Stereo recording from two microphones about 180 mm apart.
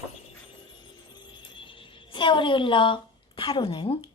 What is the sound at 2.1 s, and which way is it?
A woman's voice, 25° left (ahead or behind).